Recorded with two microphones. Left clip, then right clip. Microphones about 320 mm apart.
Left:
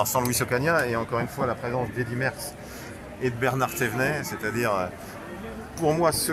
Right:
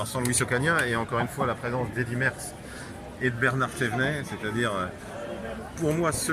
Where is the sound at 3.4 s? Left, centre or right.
Centre.